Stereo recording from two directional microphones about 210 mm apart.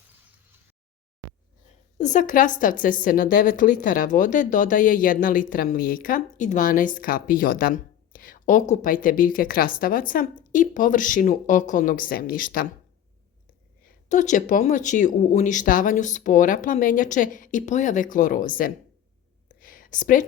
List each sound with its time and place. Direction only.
2.0 s a woman's voice: 35° left (ahead or behind)
14.1 s a woman's voice: 35° left (ahead or behind)
19.5 s a sound: 40° left (ahead or behind)